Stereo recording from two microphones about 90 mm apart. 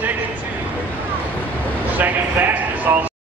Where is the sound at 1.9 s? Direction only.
20° right (ahead or behind).